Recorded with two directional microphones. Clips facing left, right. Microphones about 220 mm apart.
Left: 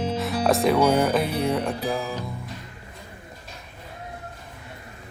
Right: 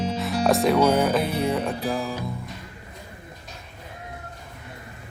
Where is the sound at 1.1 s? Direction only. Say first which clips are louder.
Even; centre (ahead or behind).